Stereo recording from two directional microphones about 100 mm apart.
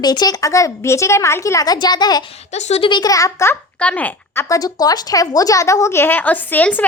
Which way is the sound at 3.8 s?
15° left (ahead or behind).